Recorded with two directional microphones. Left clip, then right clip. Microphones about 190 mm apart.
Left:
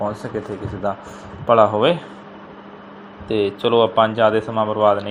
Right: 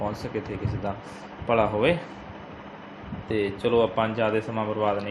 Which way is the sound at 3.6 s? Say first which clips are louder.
Left 8 dB; 20° left (ahead or behind).